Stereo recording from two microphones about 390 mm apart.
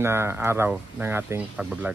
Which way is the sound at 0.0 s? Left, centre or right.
Centre.